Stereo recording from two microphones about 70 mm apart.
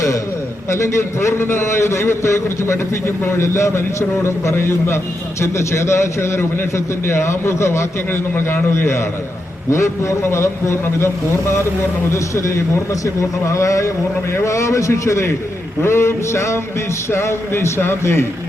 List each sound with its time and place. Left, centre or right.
0.7 s a man's voice: left